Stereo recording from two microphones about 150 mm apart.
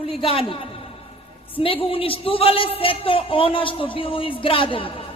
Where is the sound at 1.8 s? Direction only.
40° left (ahead or behind).